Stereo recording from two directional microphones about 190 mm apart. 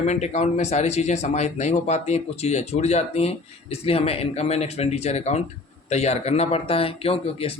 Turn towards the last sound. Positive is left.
turn(degrees=30)  # may be behind; listen again after turning